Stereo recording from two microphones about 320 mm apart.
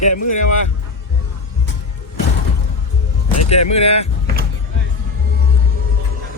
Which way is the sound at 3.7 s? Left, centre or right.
Centre.